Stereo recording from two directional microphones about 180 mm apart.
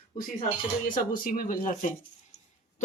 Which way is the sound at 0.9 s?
50° left (ahead or behind).